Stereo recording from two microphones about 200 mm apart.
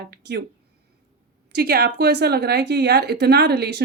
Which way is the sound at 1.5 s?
55° right (ahead or behind).